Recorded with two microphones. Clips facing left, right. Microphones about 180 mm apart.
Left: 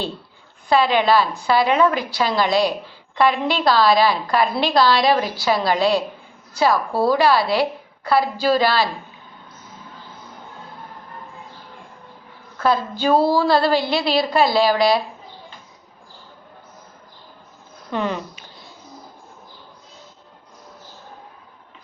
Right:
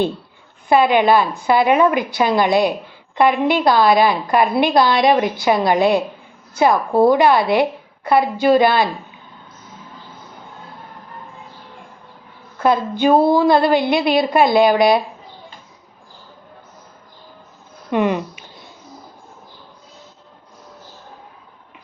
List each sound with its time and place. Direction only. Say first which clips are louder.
0.7 s a woman's voice: right 3 dB; 20° right (ahead or behind)
12.5 s a sound: right 3 dB; 20° right (ahead or behind)
13.0 s a woman's voice: right 4 dB; 20° right (ahead or behind)
17.9 s speech: right 6 dB; 15° right (ahead or behind)